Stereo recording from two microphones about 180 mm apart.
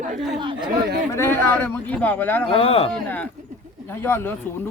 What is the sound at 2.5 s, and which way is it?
Speech, 30° left (ahead or behind).